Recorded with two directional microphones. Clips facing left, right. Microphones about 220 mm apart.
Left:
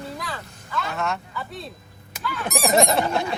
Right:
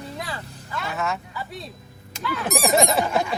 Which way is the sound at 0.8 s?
Centre (ahead or behind).